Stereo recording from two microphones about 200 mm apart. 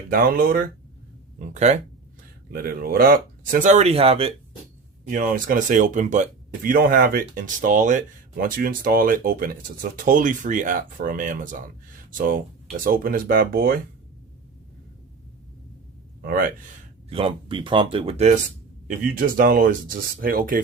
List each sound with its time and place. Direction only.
0.1 s speech: 45° right (ahead or behind)
1.4 s speech: 35° right (ahead or behind)
2.5 s speech: 45° right (ahead or behind); by 4.4 s 30° right (ahead or behind)
5.1 s speech: 45° right (ahead or behind)
12.7 s speech: 45° right (ahead or behind)
16.2 s speech: 45° right (ahead or behind)
17.1 s speech: 25° right (ahead or behind)
18.9 s speech: 45° right (ahead or behind)